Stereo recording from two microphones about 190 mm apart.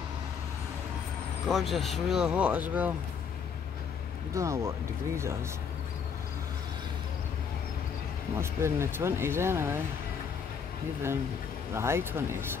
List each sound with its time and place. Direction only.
1.5 s speech: centre (ahead or behind)
4.3 s speech: 15° right (ahead or behind)
8.4 s speech: 15° right (ahead or behind)
11.7 s speech: 15° right (ahead or behind)